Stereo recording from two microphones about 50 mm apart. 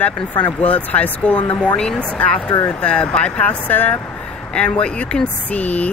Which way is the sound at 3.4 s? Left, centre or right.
Left.